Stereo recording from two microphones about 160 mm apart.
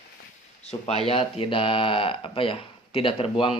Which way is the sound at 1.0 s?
35° left (ahead or behind).